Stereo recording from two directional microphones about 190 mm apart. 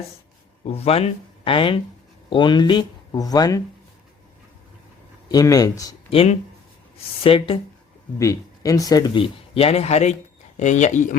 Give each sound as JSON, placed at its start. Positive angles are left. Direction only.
{"t": 0.6, "sound": "speech", "side_deg": 30}
{"t": 5.3, "sound": "speech", "side_deg": 20}
{"t": 6.1, "sound": "speech", "side_deg": 30}
{"t": 8.2, "sound": "speech", "side_deg": 15}